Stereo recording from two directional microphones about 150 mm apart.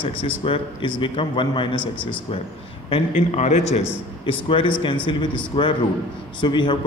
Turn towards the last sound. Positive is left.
turn(degrees=30)  # may be behind; listen again after turning